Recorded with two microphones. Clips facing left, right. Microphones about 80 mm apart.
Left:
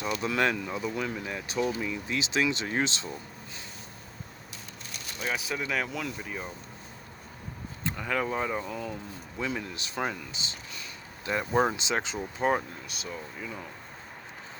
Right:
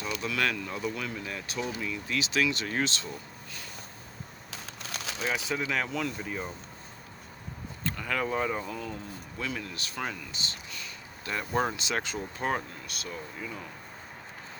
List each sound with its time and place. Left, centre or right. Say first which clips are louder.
0.2 s speech: left 3 dB; left
4.5 s a sound: right 6 dB; right
5.5 s speech: right 1 dB; centre
7.9 s speech: left 1 dB; centre
9.4 s speech: left 3 dB; centre
11.5 s speech: left 3 dB; centre